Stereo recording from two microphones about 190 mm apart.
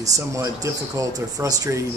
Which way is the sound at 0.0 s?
20° right (ahead or behind).